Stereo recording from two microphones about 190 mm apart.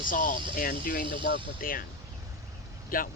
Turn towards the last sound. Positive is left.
turn(degrees=50)  # may be behind; listen again after turning